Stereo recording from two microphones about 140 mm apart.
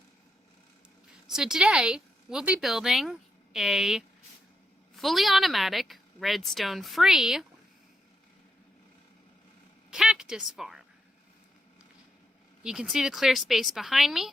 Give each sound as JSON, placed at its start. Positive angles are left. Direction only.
{"t": 1.3, "sound": "a woman's voice", "side_deg": -5}
{"t": 9.9, "sound": "a woman's voice", "side_deg": -5}
{"t": 12.6, "sound": "a woman's voice", "side_deg": -5}